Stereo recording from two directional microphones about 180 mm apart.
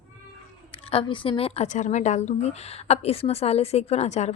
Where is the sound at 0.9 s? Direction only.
30° left (ahead or behind).